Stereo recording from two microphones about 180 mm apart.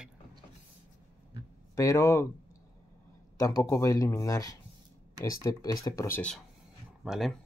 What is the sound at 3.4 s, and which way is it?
Speech, 20° left (ahead or behind).